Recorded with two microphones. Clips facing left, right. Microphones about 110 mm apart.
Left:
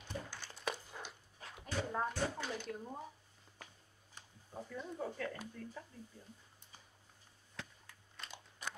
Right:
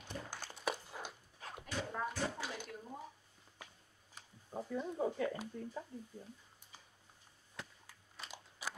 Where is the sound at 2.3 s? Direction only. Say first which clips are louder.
Left 2 dB; 5° right (ahead or behind).